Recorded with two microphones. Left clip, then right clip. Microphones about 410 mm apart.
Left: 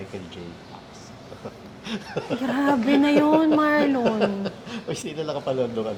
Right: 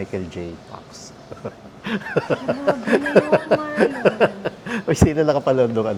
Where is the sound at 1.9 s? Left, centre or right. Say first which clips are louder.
Right 8 dB; right.